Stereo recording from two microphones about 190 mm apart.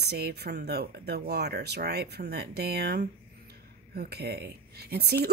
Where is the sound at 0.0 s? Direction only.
55° right (ahead or behind).